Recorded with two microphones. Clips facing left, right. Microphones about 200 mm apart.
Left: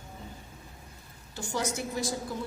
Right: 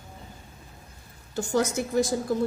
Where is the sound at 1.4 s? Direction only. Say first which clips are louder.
Right 7 dB; 45° right (ahead or behind).